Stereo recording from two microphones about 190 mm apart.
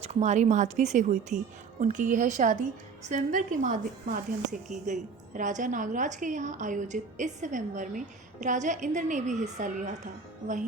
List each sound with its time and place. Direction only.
0.0 s a woman's voice: 35° right (ahead or behind)